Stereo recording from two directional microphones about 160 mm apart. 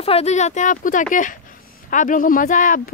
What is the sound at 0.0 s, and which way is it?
Speech, 40° left (ahead or behind).